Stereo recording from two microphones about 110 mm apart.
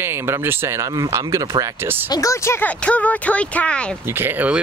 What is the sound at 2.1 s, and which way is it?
Speech, 30° left (ahead or behind).